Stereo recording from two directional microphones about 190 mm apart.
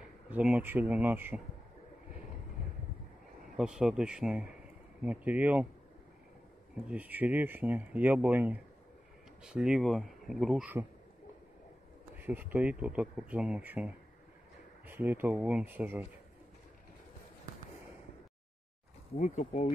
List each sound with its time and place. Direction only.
0.3 s speech: 5° right (ahead or behind)
3.5 s speech: 5° right (ahead or behind)
6.9 s speech: 10° right (ahead or behind)
12.2 s speech: 10° right (ahead or behind)
19.1 s speech: 35° left (ahead or behind)